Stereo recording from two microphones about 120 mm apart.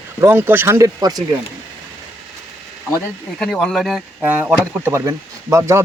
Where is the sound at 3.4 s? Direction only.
5° left (ahead or behind).